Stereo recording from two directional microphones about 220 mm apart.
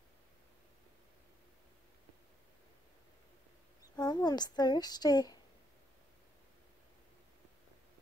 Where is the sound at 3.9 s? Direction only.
20° left (ahead or behind).